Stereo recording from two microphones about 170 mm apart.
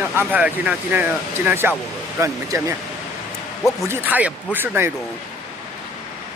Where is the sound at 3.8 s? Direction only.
10° right (ahead or behind).